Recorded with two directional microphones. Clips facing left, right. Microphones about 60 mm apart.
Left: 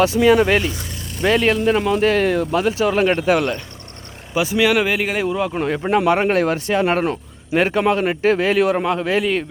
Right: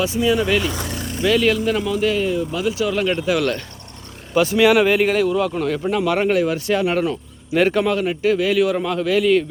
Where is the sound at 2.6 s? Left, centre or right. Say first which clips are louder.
Left 3 dB; left.